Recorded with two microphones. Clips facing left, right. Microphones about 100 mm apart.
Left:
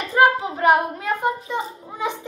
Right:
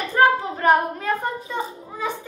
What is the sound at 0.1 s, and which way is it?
A child's voice, 15° left (ahead or behind).